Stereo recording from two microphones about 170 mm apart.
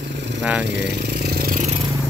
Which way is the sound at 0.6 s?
90° right.